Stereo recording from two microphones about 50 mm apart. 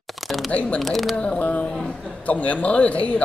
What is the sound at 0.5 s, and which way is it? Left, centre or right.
Speech, left.